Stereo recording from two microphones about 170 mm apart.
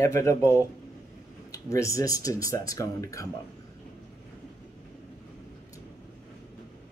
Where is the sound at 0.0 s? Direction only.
15° left (ahead or behind).